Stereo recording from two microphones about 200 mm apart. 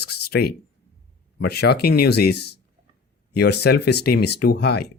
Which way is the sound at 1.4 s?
55° left (ahead or behind).